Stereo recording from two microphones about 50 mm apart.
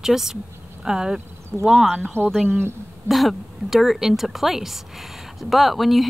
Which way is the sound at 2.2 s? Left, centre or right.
Right.